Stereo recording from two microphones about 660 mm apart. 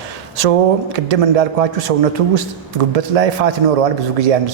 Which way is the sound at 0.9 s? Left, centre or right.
Right.